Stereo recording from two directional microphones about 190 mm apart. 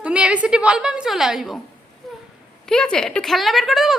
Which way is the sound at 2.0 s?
Centre (ahead or behind).